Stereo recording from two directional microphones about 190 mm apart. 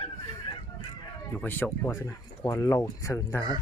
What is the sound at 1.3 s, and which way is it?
Chicken, 10° left (ahead or behind).